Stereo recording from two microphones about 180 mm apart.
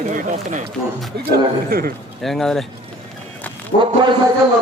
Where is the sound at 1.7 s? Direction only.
55° right (ahead or behind).